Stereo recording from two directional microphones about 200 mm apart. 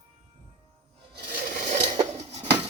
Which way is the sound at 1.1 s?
40° right (ahead or behind).